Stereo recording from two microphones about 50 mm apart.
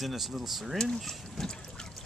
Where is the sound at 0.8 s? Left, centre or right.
Centre.